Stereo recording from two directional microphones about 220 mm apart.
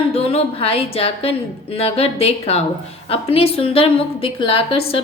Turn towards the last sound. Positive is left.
turn(degrees=25)  # may be behind; listen again after turning